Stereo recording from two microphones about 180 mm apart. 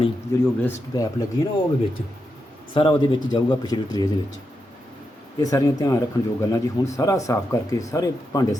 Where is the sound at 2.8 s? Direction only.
30° left (ahead or behind).